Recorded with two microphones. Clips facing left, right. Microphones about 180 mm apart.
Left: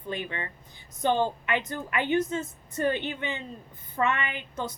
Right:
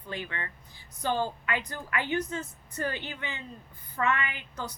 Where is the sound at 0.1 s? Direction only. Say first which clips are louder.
Left 3 dB; 20° left (ahead or behind).